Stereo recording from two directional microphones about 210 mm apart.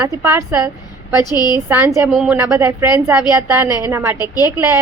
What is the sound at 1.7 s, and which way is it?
A woman's voice, 10° right (ahead or behind).